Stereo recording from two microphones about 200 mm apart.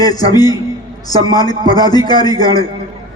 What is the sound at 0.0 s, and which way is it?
A man's voice, 20° left (ahead or behind).